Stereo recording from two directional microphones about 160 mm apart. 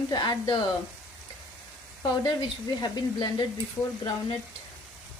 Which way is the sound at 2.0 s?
25° left (ahead or behind).